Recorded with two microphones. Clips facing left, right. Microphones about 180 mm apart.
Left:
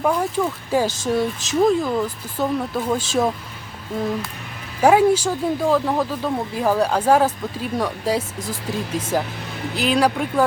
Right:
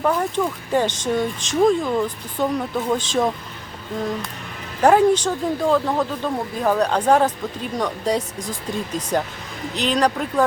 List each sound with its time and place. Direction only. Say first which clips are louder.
0.0 s speech: even; 5° left (ahead or behind)